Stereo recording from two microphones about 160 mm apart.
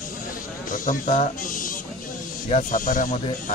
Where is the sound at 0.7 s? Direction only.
55° left (ahead or behind).